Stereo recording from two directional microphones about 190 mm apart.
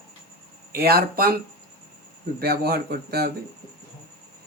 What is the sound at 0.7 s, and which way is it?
Speech, 55° right (ahead or behind).